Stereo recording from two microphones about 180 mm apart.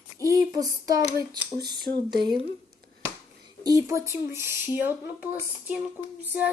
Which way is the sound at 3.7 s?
20° right (ahead or behind).